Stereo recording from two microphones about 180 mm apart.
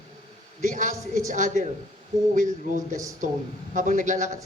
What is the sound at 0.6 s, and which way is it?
A woman's voice, 45° right (ahead or behind).